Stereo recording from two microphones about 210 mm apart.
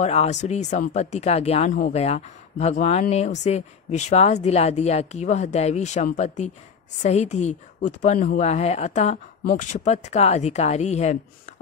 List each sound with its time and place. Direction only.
0.0 s speech: 30° left (ahead or behind)